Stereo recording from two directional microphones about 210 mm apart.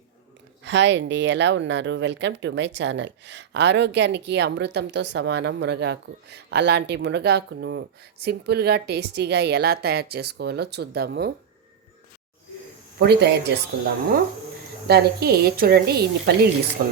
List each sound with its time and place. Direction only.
0.6 s speech: 55° right (ahead or behind)
13.0 s speech: 50° right (ahead or behind)
14.8 s speech: 50° right (ahead or behind)